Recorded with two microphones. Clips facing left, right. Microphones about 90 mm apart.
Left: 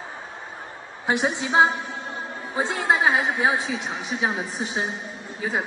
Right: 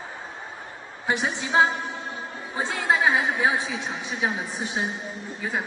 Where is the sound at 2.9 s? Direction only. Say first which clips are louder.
Even; 20° left (ahead or behind).